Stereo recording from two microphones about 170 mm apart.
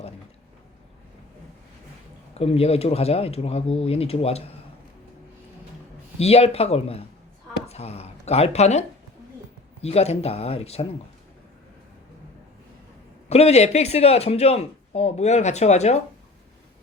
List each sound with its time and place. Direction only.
2.3 s a man's voice: 35° left (ahead or behind)
6.1 s a man's voice: 35° left (ahead or behind)
7.7 s a sound: 40° left (ahead or behind)
9.8 s a man's voice: 40° left (ahead or behind)
13.2 s a man's voice: 40° left (ahead or behind)